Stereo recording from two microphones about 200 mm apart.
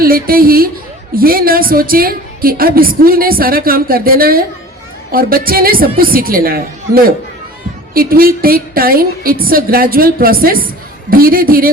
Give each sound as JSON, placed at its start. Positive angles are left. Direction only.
{"t": 0.0, "sound": "a woman's voice", "side_deg": -45}